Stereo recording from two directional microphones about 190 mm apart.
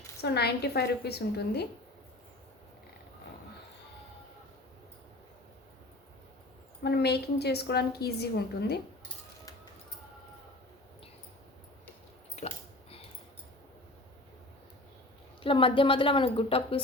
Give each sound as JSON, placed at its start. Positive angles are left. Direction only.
{"t": 0.2, "sound": "a woman's voice", "side_deg": 60}
{"t": 6.8, "sound": "a woman's voice", "side_deg": 60}
{"t": 12.4, "sound": "a sound", "side_deg": 35}
{"t": 15.4, "sound": "a woman's voice", "side_deg": 25}